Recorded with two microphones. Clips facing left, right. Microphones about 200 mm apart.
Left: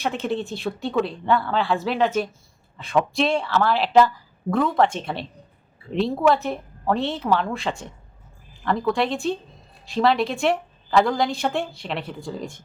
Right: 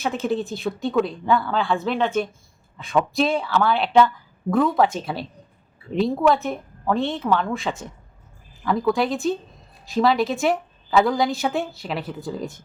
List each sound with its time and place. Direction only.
0.0 s a woman's voice: centre (ahead or behind)